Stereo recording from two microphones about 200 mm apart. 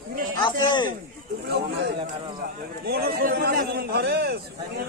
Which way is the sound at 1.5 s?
55° right (ahead or behind).